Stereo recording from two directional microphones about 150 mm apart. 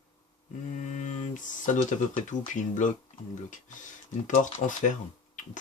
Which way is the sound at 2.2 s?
55° left (ahead or behind).